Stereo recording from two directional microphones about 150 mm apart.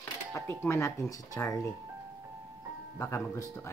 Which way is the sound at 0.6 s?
20° left (ahead or behind).